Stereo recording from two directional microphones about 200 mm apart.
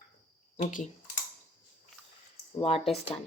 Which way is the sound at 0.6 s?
40° left (ahead or behind).